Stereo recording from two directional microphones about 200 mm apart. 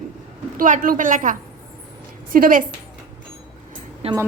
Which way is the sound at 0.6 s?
45° right (ahead or behind).